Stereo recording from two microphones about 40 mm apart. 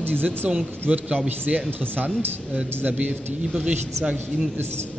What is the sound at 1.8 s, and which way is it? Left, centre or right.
Speech, right.